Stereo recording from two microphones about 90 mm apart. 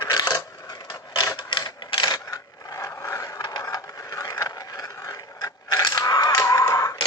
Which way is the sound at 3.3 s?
55° left (ahead or behind).